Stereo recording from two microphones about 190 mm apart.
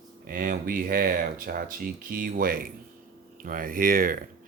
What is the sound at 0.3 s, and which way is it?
Speech, 50° right (ahead or behind).